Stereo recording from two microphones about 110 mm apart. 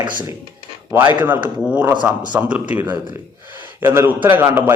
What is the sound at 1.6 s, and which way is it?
A man's voice, 10° right (ahead or behind).